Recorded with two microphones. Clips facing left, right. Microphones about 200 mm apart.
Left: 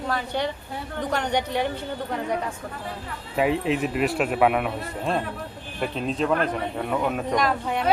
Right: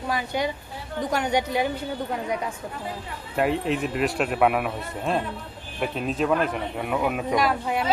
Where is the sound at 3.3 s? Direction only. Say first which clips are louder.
Left 1 dB; centre (ahead or behind).